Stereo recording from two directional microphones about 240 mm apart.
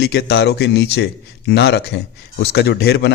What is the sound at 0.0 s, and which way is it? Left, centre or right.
Speech, left.